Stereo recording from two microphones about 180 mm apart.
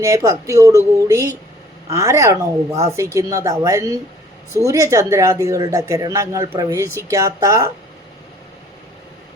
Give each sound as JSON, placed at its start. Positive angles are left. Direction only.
{"t": 0.0, "sound": "speech", "side_deg": -20}